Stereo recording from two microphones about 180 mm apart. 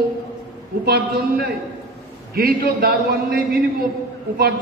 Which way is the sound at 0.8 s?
60° right (ahead or behind).